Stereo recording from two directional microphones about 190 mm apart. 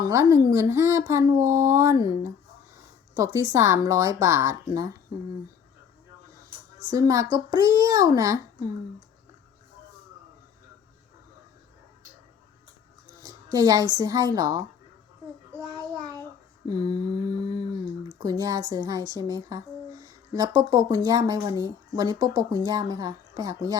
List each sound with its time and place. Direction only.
0.0 s a woman's voice: 15° right (ahead or behind)
6.9 s a woman's voice: 15° right (ahead or behind)
13.2 s a sound: 20° right (ahead or behind)
14.0 s speech: 20° right (ahead or behind)
16.6 s speech: 20° right (ahead or behind)